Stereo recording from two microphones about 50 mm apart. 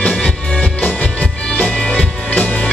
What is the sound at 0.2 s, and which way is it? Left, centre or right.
Music, centre.